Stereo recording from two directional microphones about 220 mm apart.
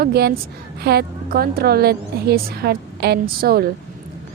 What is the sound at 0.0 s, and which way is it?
A woman's voice, 45° right (ahead or behind).